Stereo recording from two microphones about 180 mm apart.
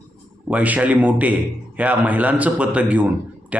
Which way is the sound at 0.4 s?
10° right (ahead or behind).